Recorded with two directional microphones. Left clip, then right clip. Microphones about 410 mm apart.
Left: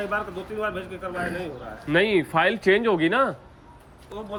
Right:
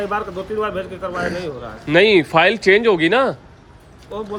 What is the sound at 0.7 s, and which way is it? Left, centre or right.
A man's voice, centre.